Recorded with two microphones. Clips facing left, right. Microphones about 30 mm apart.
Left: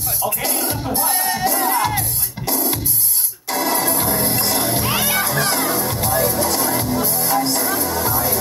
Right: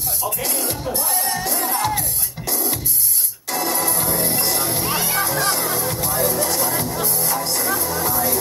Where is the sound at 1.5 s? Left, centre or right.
Left.